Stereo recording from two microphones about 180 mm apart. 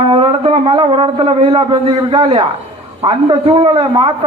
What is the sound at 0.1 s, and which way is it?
A man's voice, 30° right (ahead or behind).